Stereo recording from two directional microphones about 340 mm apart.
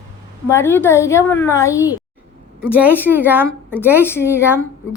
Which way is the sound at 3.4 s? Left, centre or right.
Centre.